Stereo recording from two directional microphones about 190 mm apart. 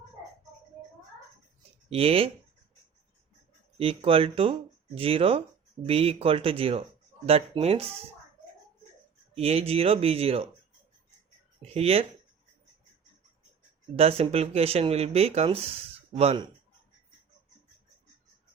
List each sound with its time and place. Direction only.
1.9 s speech: 30° right (ahead or behind)
3.8 s speech: 30° right (ahead or behind)
9.3 s speech: 30° right (ahead or behind)
11.6 s speech: 30° right (ahead or behind)
13.9 s speech: 30° right (ahead or behind)